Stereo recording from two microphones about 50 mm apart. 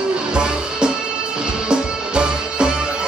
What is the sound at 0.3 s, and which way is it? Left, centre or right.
Music, centre.